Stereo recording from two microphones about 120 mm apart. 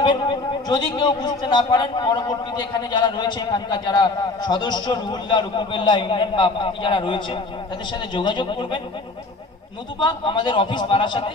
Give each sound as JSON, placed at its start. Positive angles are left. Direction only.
{"t": 0.0, "sound": "a man's voice", "side_deg": 40}
{"t": 9.9, "sound": "a man's voice", "side_deg": 40}